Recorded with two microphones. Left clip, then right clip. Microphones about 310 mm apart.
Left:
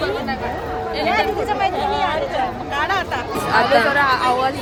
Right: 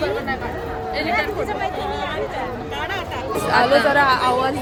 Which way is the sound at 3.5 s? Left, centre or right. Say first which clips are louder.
Even; centre.